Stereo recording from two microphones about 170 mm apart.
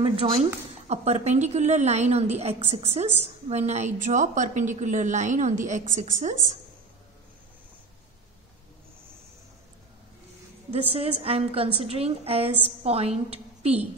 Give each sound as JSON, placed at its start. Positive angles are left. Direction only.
{"t": 0.0, "sound": "a woman's voice", "side_deg": -35}
{"t": 10.7, "sound": "a woman's voice", "side_deg": -35}